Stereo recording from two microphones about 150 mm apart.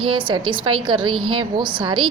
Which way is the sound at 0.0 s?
35° right (ahead or behind).